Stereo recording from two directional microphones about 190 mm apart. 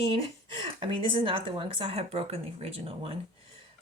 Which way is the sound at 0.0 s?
30° right (ahead or behind).